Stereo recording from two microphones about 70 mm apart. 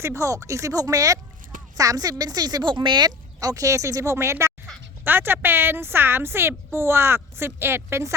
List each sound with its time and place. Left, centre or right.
0.0 s speech: right
3.5 s speech: right
5.0 s a woman's voice: right